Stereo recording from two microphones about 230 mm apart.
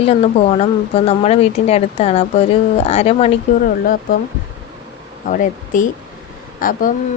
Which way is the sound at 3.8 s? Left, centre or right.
Left.